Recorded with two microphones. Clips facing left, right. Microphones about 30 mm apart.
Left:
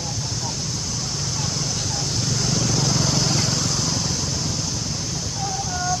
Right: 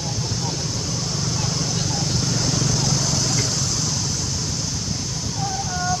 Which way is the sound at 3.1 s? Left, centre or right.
Centre.